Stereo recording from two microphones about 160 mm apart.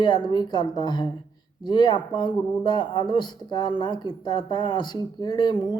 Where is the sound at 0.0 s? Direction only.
25° left (ahead or behind).